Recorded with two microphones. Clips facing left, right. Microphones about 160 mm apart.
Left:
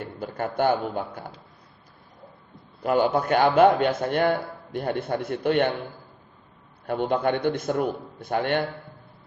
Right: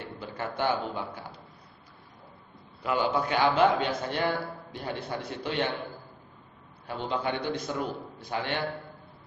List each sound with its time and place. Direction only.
0.2 s a man's voice: 50° left (ahead or behind)
2.8 s a man's voice: 45° left (ahead or behind)
6.8 s a man's voice: 55° left (ahead or behind)